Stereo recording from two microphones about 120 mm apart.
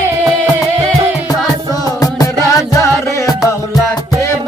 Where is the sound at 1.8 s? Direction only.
30° left (ahead or behind).